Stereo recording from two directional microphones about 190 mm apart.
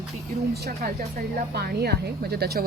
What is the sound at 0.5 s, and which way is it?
Speech, 55° right (ahead or behind).